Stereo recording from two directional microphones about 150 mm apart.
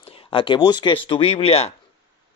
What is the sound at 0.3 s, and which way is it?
Speech, 35° left (ahead or behind).